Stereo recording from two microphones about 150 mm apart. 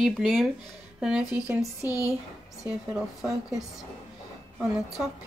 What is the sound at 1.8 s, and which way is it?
Speech, 20° left (ahead or behind).